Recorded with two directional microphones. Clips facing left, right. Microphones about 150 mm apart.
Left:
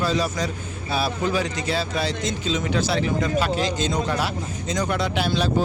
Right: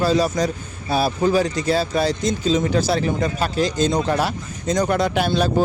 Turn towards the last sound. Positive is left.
turn(degrees=-50)  # may be behind; listen again after turning